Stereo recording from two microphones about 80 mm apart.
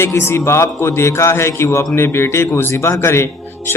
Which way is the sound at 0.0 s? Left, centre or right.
Left.